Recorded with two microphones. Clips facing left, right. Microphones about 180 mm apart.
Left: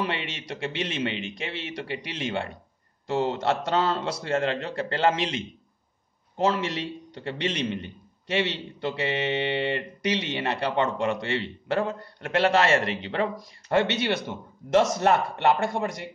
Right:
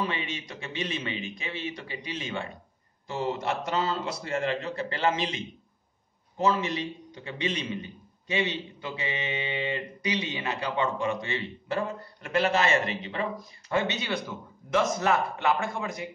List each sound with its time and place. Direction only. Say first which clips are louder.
0.0 s a man's voice: left 1 dB; 70° left (ahead or behind)